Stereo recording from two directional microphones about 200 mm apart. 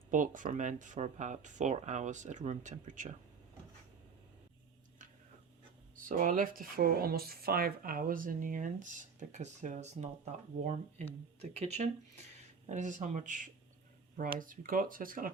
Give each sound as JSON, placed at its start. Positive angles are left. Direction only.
{"t": 0.1, "sound": "speech", "side_deg": -40}
{"t": 6.1, "sound": "speech", "side_deg": -40}
{"t": 11.3, "sound": "speech", "side_deg": -30}